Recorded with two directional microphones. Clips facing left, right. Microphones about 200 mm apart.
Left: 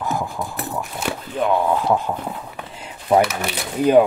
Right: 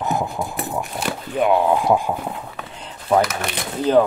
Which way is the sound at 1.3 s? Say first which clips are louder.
Right 2 dB; 15° right (ahead or behind).